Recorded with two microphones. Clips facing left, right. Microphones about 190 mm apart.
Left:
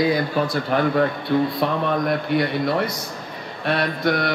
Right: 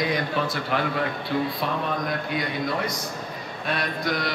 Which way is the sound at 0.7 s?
55° left (ahead or behind).